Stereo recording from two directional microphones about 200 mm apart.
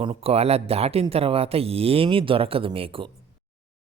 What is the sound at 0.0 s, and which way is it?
Speech, 30° right (ahead or behind).